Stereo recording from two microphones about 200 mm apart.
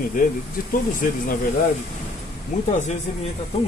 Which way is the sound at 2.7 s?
35° left (ahead or behind).